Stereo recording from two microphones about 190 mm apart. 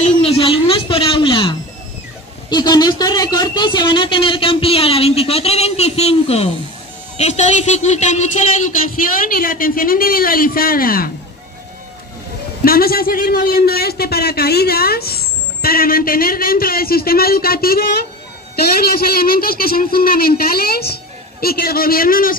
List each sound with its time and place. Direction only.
0.0 s a sound: 30° left (ahead or behind)
2.5 s a man's voice: 20° left (ahead or behind); by 11.1 s 50° left (ahead or behind)
12.6 s a man's voice: 50° left (ahead or behind)